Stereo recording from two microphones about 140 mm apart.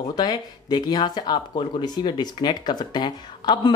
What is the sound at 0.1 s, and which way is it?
Speech, 30° left (ahead or behind).